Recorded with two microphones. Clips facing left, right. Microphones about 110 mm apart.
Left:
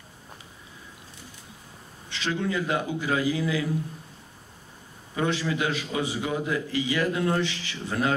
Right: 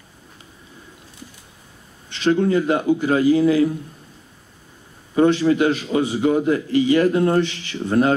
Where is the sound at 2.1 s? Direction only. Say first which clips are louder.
Right 11 dB; 45° right (ahead or behind).